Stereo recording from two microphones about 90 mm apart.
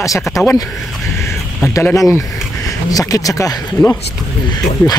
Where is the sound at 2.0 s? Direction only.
35° left (ahead or behind).